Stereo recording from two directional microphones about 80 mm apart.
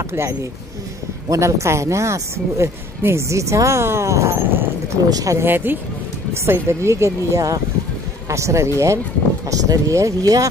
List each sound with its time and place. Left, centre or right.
0.1 s speech: right
5.1 s speech: right
5.4 s speech: right